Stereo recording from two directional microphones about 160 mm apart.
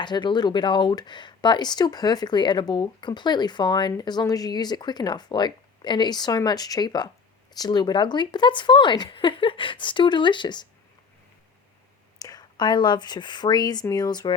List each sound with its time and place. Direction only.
0.0 s speech: 30° left (ahead or behind)
12.2 s speech: 25° left (ahead or behind)